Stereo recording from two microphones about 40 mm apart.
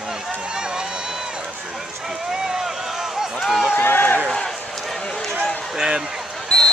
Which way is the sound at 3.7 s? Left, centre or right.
Left.